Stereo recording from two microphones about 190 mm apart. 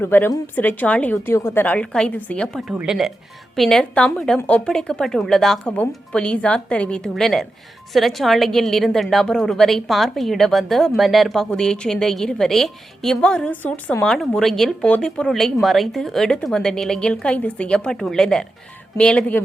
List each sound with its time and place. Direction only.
0.0 s a woman's voice: 10° left (ahead or behind)